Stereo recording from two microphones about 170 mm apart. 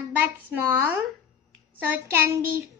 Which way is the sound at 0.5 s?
15° right (ahead or behind).